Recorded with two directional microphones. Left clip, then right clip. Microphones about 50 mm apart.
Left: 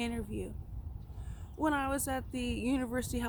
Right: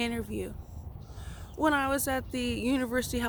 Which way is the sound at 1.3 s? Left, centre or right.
Left.